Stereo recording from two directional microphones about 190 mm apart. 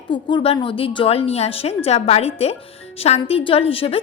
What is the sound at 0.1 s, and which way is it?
A woman's voice, 25° left (ahead or behind).